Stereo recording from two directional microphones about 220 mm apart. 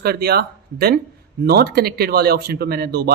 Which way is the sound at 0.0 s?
45° right (ahead or behind).